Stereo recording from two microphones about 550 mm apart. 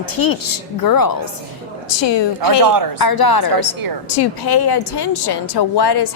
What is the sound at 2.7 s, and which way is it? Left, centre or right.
Speech, right.